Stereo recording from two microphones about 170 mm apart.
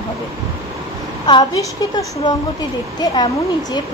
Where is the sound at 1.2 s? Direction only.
25° left (ahead or behind).